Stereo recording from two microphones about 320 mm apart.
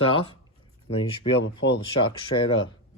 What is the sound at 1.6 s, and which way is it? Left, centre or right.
Speech, left.